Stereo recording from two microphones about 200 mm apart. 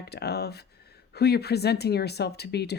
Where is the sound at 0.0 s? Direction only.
55° left (ahead or behind).